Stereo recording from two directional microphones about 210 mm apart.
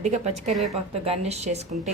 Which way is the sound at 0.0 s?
30° right (ahead or behind).